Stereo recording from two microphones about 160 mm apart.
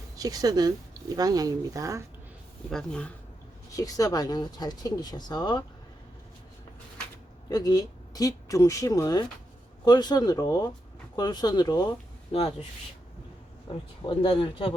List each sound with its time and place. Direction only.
0.2 s speech: 25° right (ahead or behind)
2.6 s speech: 5° left (ahead or behind)
3.8 s speech: 20° left (ahead or behind)
7.5 s speech: 25° left (ahead or behind)
12.3 s speech: 40° left (ahead or behind)
13.7 s speech: 30° left (ahead or behind)